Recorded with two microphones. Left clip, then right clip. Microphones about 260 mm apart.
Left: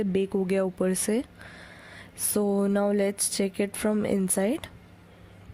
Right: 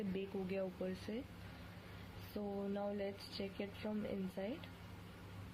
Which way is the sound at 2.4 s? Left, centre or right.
Left.